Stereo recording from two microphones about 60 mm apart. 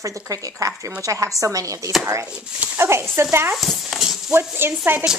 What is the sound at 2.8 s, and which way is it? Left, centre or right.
Speech, right.